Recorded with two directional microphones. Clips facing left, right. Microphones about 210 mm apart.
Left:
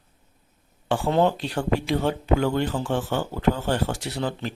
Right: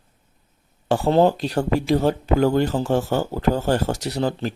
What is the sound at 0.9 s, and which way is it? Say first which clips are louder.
Speech: right 4 dB; 40° right (ahead or behind).